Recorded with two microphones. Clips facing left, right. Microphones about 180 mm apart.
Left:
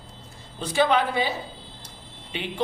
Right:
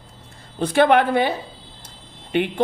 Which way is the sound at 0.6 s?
60° right (ahead or behind).